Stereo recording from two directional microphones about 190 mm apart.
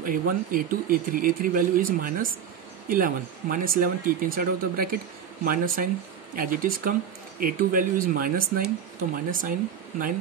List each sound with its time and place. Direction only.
0.0 s speech: 45° right (ahead or behind)